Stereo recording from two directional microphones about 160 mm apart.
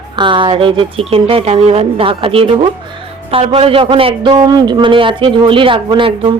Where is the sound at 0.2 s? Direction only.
30° right (ahead or behind).